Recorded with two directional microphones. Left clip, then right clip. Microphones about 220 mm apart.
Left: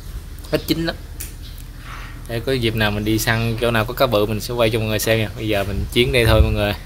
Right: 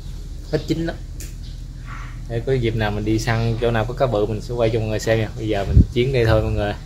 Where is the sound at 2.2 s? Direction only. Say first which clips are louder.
Left 1 dB; 45° left (ahead or behind).